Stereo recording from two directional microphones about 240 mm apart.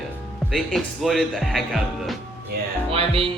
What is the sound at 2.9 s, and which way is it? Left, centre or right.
Music, right.